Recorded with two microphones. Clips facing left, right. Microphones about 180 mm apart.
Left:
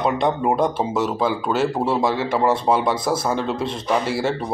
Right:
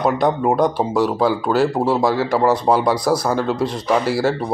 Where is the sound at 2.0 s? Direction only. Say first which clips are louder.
Right 3 dB; 25° left (ahead or behind).